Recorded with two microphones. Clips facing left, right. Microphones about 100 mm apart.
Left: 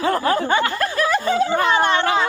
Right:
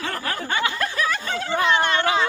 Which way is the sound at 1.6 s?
40° left (ahead or behind).